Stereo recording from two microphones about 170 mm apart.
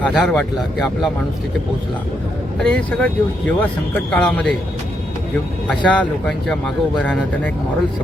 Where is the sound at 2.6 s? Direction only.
5° left (ahead or behind).